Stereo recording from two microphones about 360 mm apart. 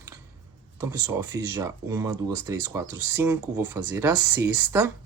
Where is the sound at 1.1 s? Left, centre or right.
Centre.